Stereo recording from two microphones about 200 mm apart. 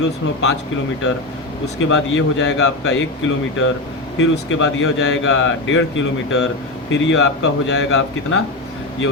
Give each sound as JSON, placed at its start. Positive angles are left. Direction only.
{"t": 1.9, "sound": "speech", "side_deg": 70}